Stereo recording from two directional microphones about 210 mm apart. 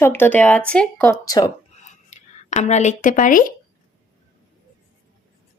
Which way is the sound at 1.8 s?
35° left (ahead or behind).